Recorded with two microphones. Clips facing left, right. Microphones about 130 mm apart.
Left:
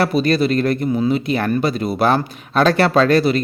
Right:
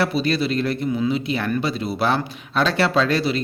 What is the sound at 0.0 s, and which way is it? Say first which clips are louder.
Speech: left 5 dB; 50° left (ahead or behind).